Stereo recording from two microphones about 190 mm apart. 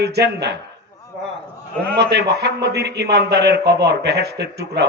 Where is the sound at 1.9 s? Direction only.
60° right (ahead or behind).